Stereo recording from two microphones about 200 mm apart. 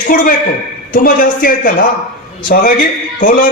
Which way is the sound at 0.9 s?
45° left (ahead or behind).